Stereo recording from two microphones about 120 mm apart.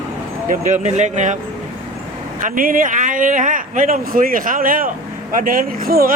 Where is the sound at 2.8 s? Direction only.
90° right.